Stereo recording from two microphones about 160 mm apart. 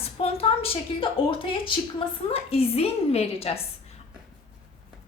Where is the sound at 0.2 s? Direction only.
40° left (ahead or behind).